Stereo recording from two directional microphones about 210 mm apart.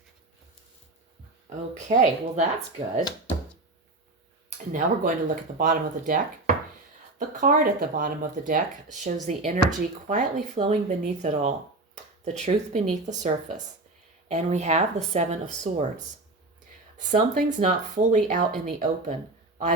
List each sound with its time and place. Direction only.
1.5 s speech: 35° right (ahead or behind)
4.7 s speech: 40° right (ahead or behind)
17.0 s speech: 35° right (ahead or behind)